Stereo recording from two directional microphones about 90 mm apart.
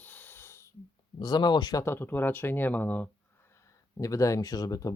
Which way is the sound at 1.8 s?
25° left (ahead or behind).